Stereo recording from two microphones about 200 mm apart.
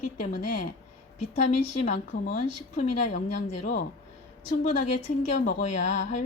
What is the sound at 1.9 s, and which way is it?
A woman's voice, 45° left (ahead or behind).